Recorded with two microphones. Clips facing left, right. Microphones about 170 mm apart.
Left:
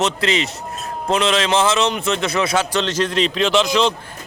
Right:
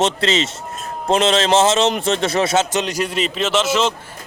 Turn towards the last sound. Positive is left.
turn(degrees=-5)  # may be behind; listen again after turning